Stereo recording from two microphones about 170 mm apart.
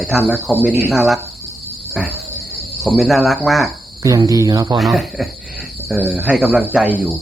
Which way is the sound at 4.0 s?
20° right (ahead or behind).